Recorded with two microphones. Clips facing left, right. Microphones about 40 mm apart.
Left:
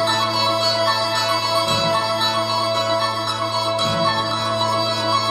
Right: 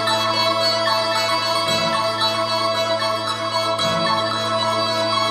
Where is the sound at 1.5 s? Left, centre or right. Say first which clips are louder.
Left 1 dB; right.